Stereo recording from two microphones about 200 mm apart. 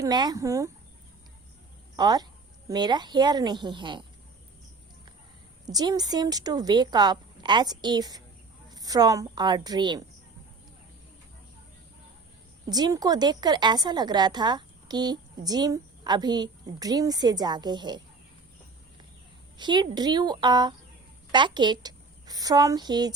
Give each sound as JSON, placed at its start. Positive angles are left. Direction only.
{"t": 0.0, "sound": "speech", "side_deg": -20}
{"t": 2.0, "sound": "a woman's voice", "side_deg": -20}
{"t": 5.6, "sound": "a woman's voice", "side_deg": -20}
{"t": 12.6, "sound": "a woman's voice", "side_deg": -20}
{"t": 19.5, "sound": "a woman's voice", "side_deg": -20}